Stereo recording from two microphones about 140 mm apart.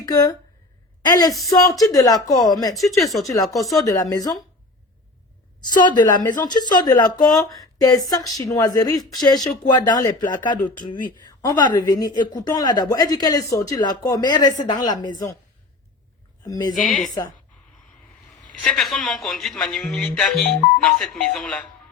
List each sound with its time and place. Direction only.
0.0 s speech: 25° left (ahead or behind)
3.0 s speech: centre (ahead or behind)
3.8 s speech: 25° left (ahead or behind)
5.6 s a woman's voice: 30° left (ahead or behind)
10.6 s speech: 10° left (ahead or behind)
11.6 s speech: 30° left (ahead or behind)
16.5 s speech: 30° left (ahead or behind)
16.7 s speech: 75° left (ahead or behind)
18.6 s speech: centre (ahead or behind)